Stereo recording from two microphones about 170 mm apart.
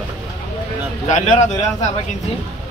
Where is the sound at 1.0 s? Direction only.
45° left (ahead or behind).